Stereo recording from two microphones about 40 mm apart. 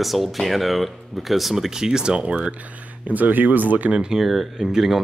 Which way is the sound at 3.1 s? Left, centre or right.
Right.